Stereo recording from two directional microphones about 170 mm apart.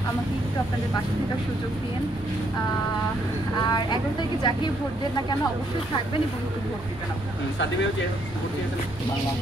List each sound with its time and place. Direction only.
3.7 s speech: 25° left (ahead or behind)